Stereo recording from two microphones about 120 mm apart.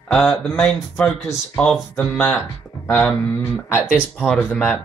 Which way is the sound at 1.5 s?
5° left (ahead or behind).